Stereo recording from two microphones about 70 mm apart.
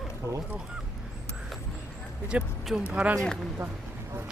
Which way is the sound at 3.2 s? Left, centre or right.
Centre.